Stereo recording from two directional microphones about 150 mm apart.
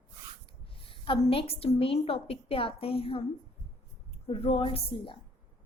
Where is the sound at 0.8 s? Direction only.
35° left (ahead or behind).